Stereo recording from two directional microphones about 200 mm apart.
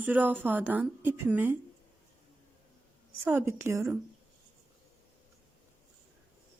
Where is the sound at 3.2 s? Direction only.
10° right (ahead or behind).